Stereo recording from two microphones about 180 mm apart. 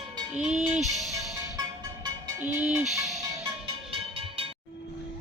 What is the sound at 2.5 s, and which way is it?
Speech, 5° right (ahead or behind).